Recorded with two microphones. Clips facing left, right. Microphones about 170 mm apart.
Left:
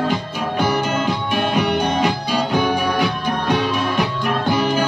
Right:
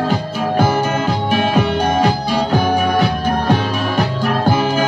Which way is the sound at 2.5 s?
40° right (ahead or behind).